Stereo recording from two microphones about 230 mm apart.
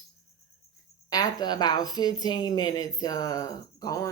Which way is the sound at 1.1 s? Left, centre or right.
Centre.